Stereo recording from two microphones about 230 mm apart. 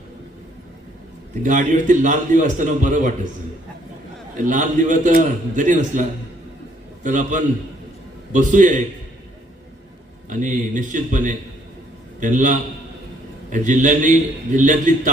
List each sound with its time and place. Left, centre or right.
1.4 s a man's voice: right
4.4 s a man's voice: right
10.2 s a man's voice: right